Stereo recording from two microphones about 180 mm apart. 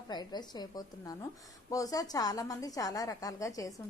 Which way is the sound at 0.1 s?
25° left (ahead or behind).